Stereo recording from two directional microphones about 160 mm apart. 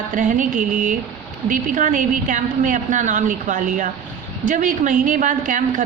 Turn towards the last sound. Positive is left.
turn(degrees=-55)  # may be behind; listen again after turning